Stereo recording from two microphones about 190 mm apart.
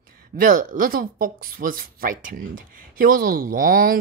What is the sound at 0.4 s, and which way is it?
Speech, 45° right (ahead or behind).